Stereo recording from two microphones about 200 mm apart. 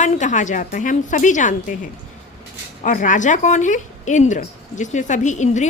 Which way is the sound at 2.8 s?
40° left (ahead or behind).